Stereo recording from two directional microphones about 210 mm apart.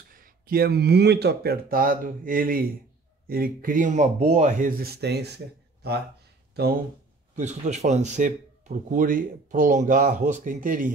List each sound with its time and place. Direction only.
0.1 s speech: 45° right (ahead or behind)
7.3 s speech: 35° right (ahead or behind)